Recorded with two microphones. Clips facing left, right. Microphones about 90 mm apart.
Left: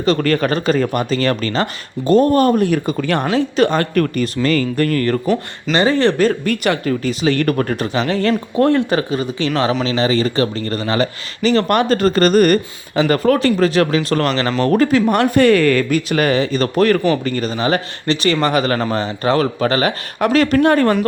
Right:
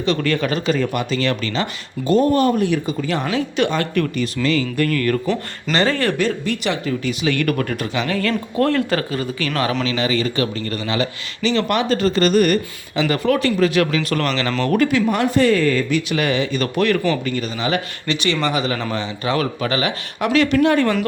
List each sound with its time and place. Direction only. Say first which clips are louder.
0.0 s speech: left 4 dB; 45° left (ahead or behind)
3.2 s speech: left 5 dB; 35° left (ahead or behind)
5.7 s speech: left 4 dB; 15° left (ahead or behind)
6.1 s speech: left 5 dB; 45° left (ahead or behind)
7.1 s speech: left 3 dB; 35° left (ahead or behind)
9.8 s speech: left 4 dB; 35° left (ahead or behind)
15.1 s speech: left 4 dB; 60° left (ahead or behind)
15.9 s speech: left 4 dB; 45° left (ahead or behind)
18.9 s speech: left 5 dB; 40° left (ahead or behind)